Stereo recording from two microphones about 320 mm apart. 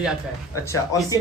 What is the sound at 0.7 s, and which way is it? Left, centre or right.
Speech, centre.